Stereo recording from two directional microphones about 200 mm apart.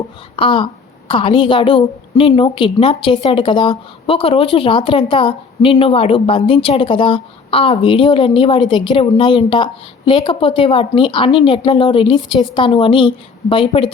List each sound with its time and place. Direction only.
0.3 s a woman's voice: 25° left (ahead or behind)